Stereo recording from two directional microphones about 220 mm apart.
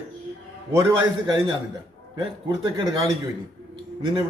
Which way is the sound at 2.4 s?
20° right (ahead or behind).